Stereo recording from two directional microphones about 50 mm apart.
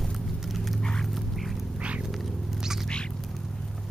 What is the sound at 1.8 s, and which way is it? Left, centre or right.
Cat, right.